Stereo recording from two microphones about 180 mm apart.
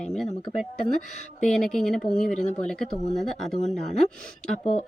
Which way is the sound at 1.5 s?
5° left (ahead or behind).